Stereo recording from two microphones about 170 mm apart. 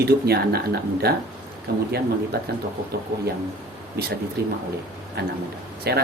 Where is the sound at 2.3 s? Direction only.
65° right (ahead or behind).